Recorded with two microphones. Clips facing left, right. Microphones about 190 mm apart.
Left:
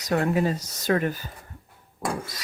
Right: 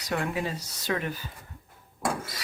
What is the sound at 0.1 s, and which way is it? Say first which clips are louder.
Speech: left 7 dB; 45° left (ahead or behind).